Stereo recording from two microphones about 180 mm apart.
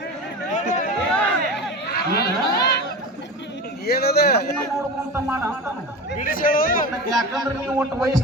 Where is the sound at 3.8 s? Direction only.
65° left (ahead or behind).